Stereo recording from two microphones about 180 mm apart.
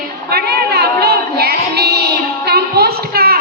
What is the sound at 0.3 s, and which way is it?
Music, 65° right (ahead or behind).